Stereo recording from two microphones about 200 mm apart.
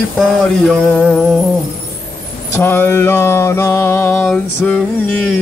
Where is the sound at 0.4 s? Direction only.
5° left (ahead or behind).